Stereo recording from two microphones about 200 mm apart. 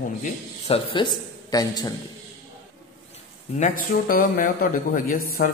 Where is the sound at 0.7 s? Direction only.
25° left (ahead or behind).